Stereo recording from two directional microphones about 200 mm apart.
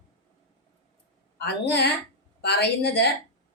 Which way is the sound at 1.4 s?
55° left (ahead or behind).